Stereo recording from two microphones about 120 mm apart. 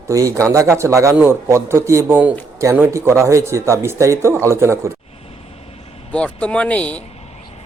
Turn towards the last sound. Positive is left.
turn(degrees=10)  # may be behind; listen again after turning